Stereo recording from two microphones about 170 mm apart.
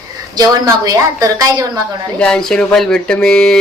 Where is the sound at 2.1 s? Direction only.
5° left (ahead or behind).